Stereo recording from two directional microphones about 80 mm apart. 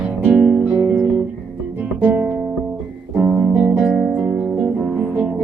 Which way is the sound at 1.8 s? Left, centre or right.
Right.